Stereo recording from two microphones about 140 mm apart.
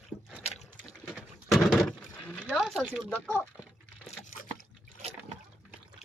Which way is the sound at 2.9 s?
5° left (ahead or behind).